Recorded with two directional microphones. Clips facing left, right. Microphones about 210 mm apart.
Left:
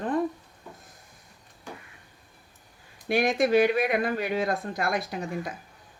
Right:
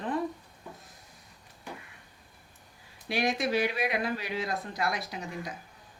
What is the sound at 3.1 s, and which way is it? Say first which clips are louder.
Speech: left 6 dB; 50° left (ahead or behind).